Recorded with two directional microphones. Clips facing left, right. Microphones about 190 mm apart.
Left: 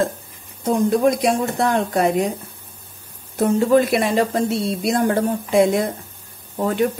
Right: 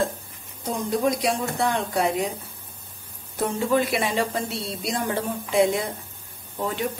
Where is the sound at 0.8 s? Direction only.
55° left (ahead or behind).